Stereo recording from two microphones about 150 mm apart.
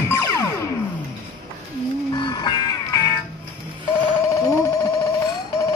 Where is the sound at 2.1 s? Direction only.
25° left (ahead or behind).